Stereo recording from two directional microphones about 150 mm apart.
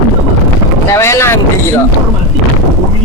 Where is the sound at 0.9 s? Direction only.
20° left (ahead or behind).